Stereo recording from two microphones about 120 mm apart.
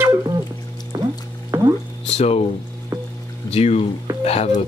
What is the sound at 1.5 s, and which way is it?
Music, 20° right (ahead or behind).